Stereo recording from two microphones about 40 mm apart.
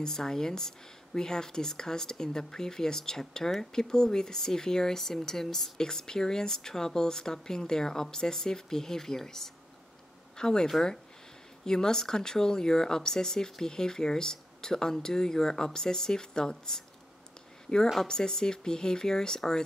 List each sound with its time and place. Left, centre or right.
0.0 s speech: centre
18.0 s speech: centre